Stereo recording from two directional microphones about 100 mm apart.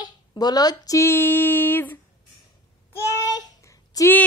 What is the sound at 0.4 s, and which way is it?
Speech, 40° left (ahead or behind).